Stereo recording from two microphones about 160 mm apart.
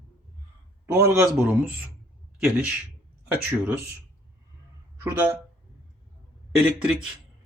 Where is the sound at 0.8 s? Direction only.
20° right (ahead or behind).